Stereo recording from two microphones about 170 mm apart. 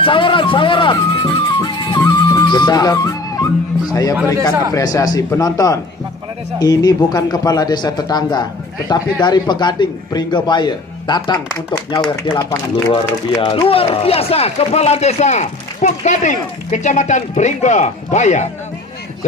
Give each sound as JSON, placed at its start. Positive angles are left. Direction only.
{"t": 0.0, "sound": "speech", "side_deg": 30}